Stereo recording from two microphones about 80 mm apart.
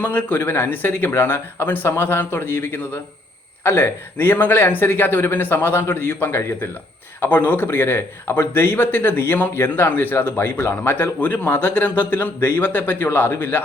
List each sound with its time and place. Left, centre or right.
0.0 s a man's voice: left